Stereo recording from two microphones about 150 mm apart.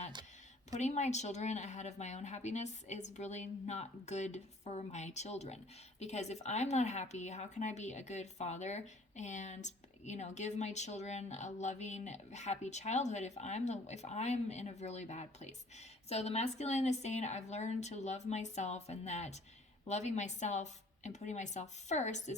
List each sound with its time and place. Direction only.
0.7 s speech: 50° left (ahead or behind)